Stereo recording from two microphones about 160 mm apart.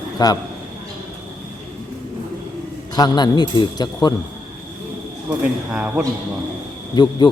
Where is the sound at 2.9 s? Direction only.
25° left (ahead or behind).